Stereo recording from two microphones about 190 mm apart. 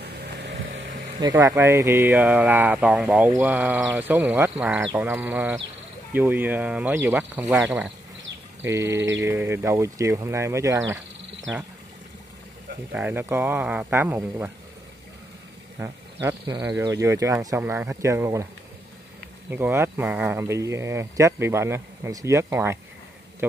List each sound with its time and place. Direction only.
0.0 s vehicle: 60° right (ahead or behind)
1.3 s speech: 15° right (ahead or behind)
8.6 s speech: 15° right (ahead or behind)
11.5 s speech: centre (ahead or behind)
12.9 s speech: 10° right (ahead or behind)
15.8 s speech: 15° right (ahead or behind)
19.5 s speech: 10° right (ahead or behind)